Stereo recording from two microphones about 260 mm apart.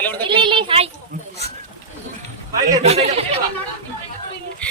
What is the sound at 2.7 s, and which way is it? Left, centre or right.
Speech, right.